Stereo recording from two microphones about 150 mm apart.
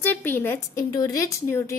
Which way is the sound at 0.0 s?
10° left (ahead or behind).